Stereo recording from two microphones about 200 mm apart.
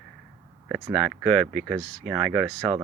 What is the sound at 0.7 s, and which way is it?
Speech, centre (ahead or behind).